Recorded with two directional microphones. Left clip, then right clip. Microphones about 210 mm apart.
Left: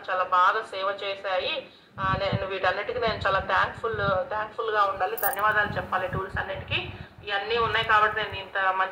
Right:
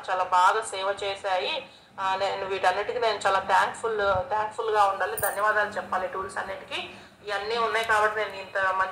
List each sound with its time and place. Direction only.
0.0 s a woman's voice: 15° right (ahead or behind)